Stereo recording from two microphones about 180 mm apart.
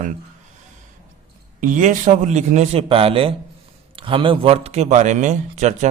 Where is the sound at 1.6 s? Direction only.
45° right (ahead or behind).